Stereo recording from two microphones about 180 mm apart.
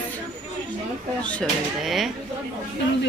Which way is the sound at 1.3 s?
5° left (ahead or behind).